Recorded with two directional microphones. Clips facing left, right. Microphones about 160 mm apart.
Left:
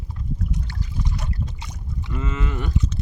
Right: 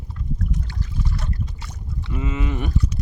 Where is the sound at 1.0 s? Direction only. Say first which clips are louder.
Even; 20° left (ahead or behind).